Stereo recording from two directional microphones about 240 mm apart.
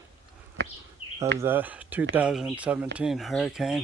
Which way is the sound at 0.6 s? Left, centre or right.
Right.